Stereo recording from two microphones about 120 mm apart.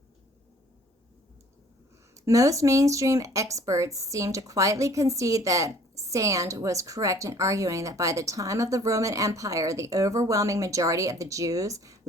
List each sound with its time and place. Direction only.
2.1 s speech: 25° right (ahead or behind)